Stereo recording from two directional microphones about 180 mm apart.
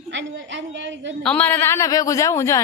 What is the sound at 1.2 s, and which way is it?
A woman's voice, 10° left (ahead or behind).